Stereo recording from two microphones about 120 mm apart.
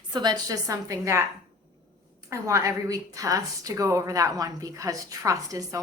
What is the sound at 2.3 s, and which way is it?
A woman's voice, 25° right (ahead or behind).